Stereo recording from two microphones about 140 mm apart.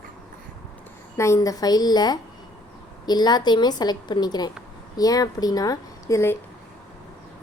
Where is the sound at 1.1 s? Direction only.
20° left (ahead or behind).